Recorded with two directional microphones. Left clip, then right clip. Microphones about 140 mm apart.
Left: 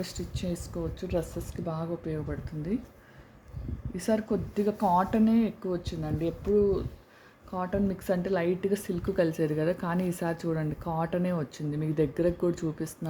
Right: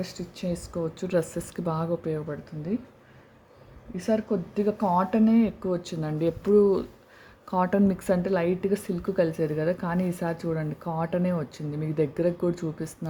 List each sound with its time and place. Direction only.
0.0 s a woman's voice: centre (ahead or behind)
0.9 s speech: 35° right (ahead or behind)
3.9 s speech: centre (ahead or behind); by 7.8 s 40° right (ahead or behind)
7.9 s a woman's voice: 20° right (ahead or behind); by 13.1 s centre (ahead or behind)